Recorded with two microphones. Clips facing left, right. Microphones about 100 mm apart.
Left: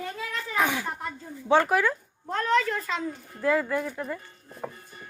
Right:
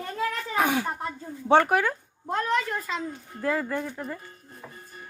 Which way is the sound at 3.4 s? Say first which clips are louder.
Left 2 dB; 30° right (ahead or behind).